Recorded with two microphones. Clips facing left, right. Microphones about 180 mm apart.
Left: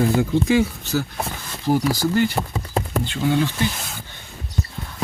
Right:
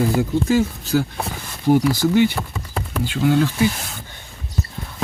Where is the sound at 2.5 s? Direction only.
20° left (ahead or behind).